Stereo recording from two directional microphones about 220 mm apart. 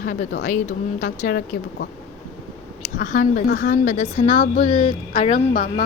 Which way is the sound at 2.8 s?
35° left (ahead or behind).